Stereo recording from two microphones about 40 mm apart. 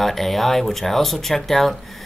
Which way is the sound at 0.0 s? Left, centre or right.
Centre.